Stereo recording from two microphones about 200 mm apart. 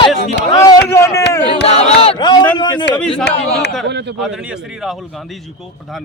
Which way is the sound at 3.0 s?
5° left (ahead or behind).